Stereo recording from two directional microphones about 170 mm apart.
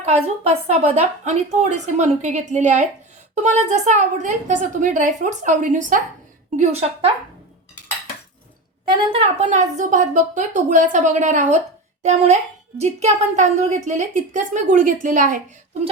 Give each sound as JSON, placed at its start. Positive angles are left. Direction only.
{"t": 0.0, "sound": "a woman's voice", "side_deg": -40}
{"t": 9.1, "sound": "a child's voice", "side_deg": -40}